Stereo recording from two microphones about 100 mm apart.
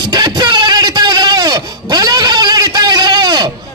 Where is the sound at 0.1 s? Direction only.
45° right (ahead or behind).